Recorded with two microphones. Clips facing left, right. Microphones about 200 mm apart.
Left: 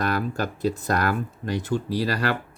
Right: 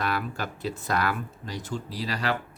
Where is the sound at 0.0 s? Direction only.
45° left (ahead or behind); by 2.3 s 60° left (ahead or behind).